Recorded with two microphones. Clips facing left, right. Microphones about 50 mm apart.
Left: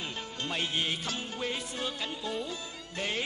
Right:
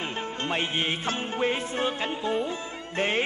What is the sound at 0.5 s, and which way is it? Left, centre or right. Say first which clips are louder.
Music: right 4 dB; right.